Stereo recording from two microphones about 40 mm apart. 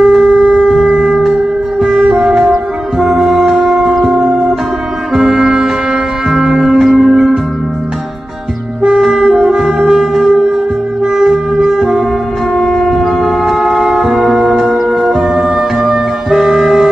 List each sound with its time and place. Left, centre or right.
0.0 s shofar: centre
0.7 s shofar: centre
3.0 s brass instrument: centre
6.6 s music: centre
8.8 s wind instrument: centre
11.1 s music: centre